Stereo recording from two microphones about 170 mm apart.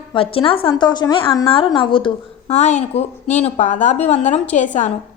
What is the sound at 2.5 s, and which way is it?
A woman's voice, 40° left (ahead or behind).